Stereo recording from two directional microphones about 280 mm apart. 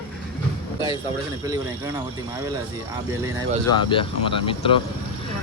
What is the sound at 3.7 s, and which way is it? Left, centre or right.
Speech, centre.